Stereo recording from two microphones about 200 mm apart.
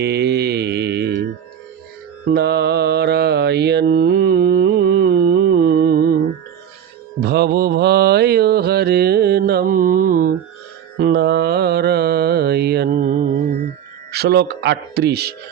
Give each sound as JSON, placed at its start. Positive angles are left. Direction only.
{"t": 0.0, "sound": "mantra", "side_deg": -55}
{"t": 2.2, "sound": "mantra", "side_deg": -55}
{"t": 7.2, "sound": "mantra", "side_deg": -55}
{"t": 14.1, "sound": "speech", "side_deg": -55}